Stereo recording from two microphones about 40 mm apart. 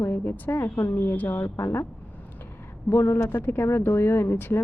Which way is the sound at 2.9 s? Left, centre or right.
Left.